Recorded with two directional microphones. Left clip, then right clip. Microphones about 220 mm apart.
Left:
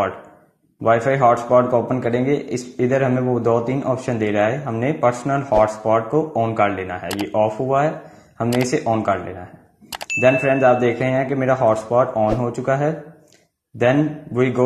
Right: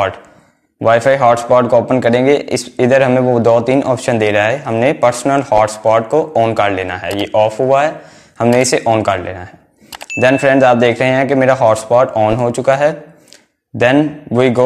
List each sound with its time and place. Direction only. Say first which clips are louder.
0.8 s a man's voice: right 6 dB; 40° right (ahead or behind)
9.8 s a sound: even; centre (ahead or behind)
10.1 s a man's voice: right 5 dB; 40° right (ahead or behind)